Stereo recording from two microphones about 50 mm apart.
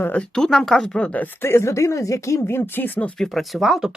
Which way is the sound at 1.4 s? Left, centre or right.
Left.